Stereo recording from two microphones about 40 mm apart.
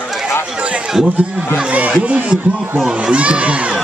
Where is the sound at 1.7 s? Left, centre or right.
Right.